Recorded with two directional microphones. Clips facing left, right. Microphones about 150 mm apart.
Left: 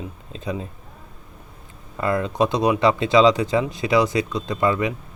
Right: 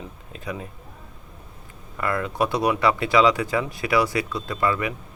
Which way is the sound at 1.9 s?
25° left (ahead or behind).